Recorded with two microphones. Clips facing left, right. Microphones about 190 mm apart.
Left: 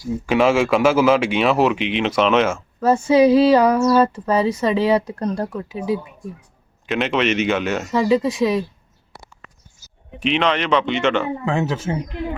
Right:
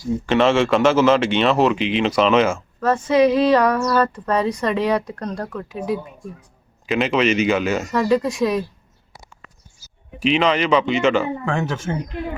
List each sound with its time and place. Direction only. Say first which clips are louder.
0.1 s speech: even; 5° left (ahead or behind)
3.8 s speech: left 4 dB; 25° left (ahead or behind)
4.1 s speech: left 2 dB; 5° left (ahead or behind)
10.2 s speech: right 2 dB; centre (ahead or behind)
11.9 s speech: left 1 dB; 15° left (ahead or behind)